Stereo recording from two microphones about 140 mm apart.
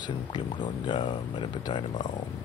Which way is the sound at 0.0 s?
30° left (ahead or behind).